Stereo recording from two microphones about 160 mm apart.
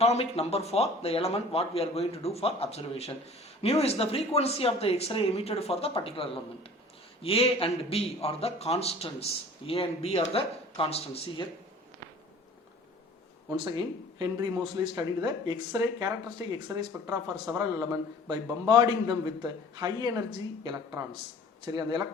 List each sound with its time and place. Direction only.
0.0 s speech: 40° left (ahead or behind)
13.7 s speech: 25° right (ahead or behind)
21.7 s speech: 25° right (ahead or behind)